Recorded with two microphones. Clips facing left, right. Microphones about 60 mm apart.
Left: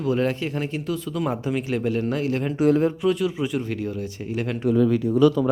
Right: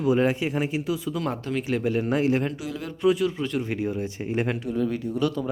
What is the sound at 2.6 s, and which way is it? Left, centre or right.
Speech, left.